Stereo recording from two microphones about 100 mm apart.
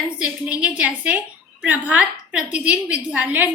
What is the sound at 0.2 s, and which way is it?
A woman's voice, 10° right (ahead or behind).